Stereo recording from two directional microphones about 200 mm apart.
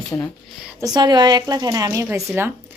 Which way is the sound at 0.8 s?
20° right (ahead or behind).